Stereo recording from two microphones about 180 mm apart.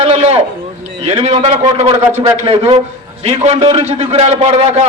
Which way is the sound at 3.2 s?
35° right (ahead or behind).